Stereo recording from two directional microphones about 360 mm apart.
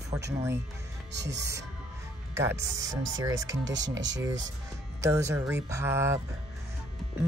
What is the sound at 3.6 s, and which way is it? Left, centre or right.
Speech, right.